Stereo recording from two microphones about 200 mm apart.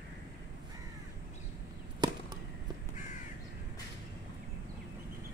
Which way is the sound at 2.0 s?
20° right (ahead or behind).